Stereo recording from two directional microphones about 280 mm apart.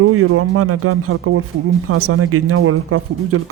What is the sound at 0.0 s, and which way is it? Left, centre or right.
Speech, right.